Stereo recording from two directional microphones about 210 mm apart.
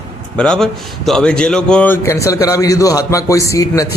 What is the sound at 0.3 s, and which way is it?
A man's voice, 5° left (ahead or behind).